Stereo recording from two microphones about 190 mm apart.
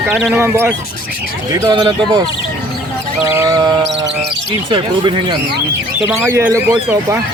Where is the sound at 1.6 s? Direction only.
20° right (ahead or behind).